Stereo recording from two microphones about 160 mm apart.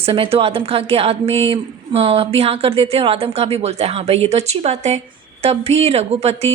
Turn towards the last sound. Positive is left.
turn(degrees=-40)  # may be behind; listen again after turning